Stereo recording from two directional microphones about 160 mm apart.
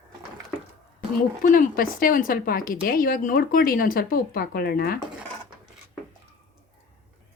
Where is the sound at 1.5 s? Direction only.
60° left (ahead or behind).